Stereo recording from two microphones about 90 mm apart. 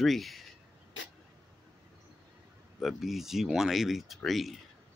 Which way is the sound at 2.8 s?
Centre (ahead or behind).